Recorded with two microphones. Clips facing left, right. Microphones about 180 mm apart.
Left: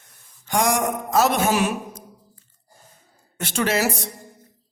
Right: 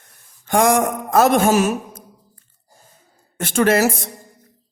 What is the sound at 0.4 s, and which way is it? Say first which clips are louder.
Speech: right 5 dB; 55° right (ahead or behind).